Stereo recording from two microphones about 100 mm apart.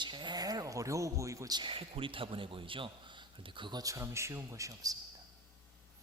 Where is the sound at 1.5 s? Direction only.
60° right (ahead or behind); by 4.9 s 35° right (ahead or behind).